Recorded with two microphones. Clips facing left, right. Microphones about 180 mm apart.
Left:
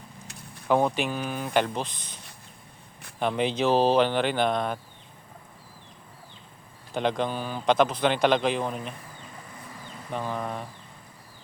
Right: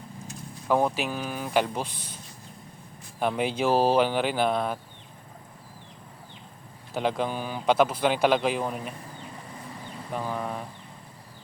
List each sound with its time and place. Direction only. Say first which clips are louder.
0.3 s vehicle: right 5 dB; 65° left (ahead or behind)
0.7 s speech: left 1 dB; 5° right (ahead or behind)
3.2 s speech: left 1 dB; 5° right (ahead or behind)
6.9 s speech: left 1 dB; 5° right (ahead or behind)
10.1 s speech: even; 5° right (ahead or behind)